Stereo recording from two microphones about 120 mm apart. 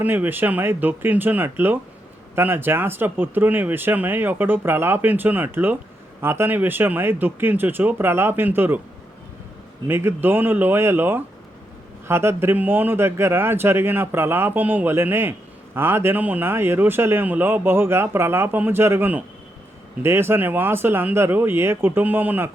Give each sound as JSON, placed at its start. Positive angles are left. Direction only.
{"t": 0.0, "sound": "a man's voice", "side_deg": -15}
{"t": 9.8, "sound": "a man's voice", "side_deg": -20}